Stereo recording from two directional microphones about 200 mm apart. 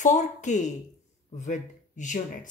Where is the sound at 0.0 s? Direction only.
35° left (ahead or behind).